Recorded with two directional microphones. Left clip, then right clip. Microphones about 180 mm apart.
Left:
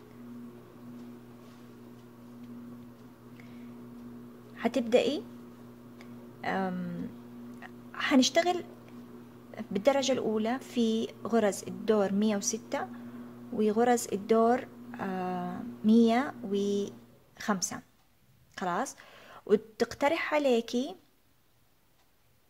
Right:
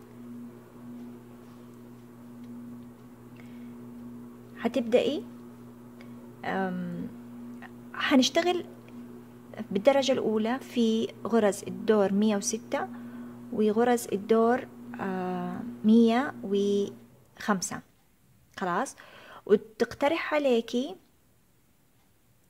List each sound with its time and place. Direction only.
4.6 s speech: 5° right (ahead or behind)
5.9 s a sound: 10° right (ahead or behind)
9.6 s a woman's voice: 15° right (ahead or behind)